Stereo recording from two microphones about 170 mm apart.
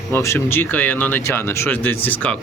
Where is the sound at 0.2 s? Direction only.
15° left (ahead or behind).